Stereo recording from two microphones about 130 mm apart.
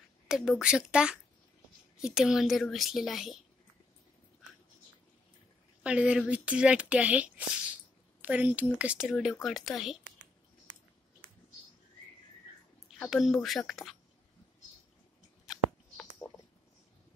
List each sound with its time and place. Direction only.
0.3 s a woman's voice: 5° right (ahead or behind)
5.9 s a woman's voice: 10° right (ahead or behind)
13.0 s a woman's voice: centre (ahead or behind)
15.4 s a sound: centre (ahead or behind)